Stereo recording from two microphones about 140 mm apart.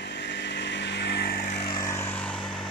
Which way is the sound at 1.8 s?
20° left (ahead or behind).